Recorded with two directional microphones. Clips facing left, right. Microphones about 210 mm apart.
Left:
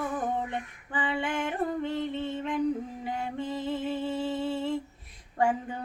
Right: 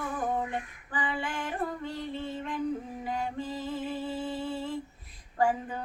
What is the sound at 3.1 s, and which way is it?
Music, 25° left (ahead or behind).